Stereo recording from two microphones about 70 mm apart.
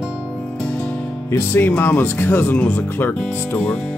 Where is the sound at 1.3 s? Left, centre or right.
Left.